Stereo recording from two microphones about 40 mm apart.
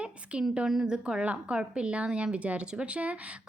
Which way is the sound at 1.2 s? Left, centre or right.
Right.